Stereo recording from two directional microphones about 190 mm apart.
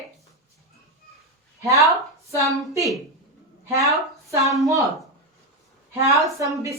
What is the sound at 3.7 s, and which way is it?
Speech, 15° right (ahead or behind).